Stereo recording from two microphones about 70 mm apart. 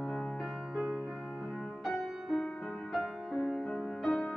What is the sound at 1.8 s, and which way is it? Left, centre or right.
Music, centre.